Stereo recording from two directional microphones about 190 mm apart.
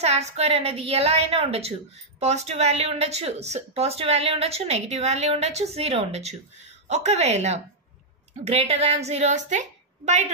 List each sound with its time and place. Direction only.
0.0 s speech: 35° right (ahead or behind)